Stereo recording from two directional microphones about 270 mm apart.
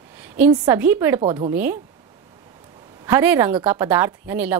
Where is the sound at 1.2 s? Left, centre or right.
Centre.